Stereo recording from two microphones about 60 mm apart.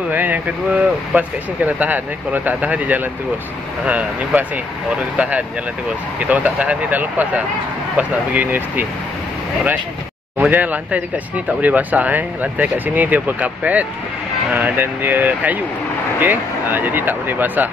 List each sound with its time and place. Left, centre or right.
0.1 s speech: right
10.5 s speech: right